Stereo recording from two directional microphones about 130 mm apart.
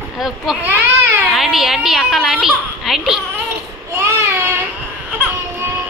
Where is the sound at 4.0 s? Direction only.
20° right (ahead or behind).